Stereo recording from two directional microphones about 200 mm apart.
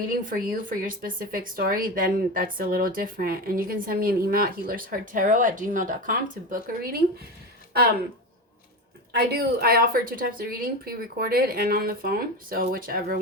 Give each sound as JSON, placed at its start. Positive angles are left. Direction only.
{"t": 0.0, "sound": "speech", "side_deg": -45}
{"t": 9.1, "sound": "speech", "side_deg": -50}